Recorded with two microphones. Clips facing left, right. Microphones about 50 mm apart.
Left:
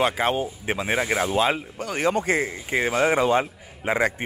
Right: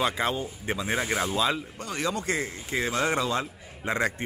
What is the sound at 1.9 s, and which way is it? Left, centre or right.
Speech, left.